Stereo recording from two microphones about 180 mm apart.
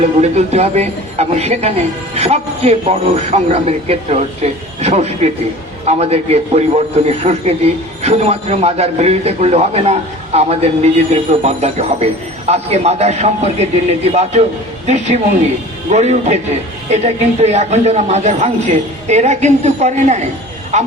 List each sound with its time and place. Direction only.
0.0 s a man's voice: 40° right (ahead or behind)